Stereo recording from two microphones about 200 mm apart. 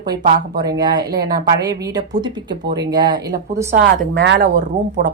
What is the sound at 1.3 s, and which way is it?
Speech, 20° right (ahead or behind).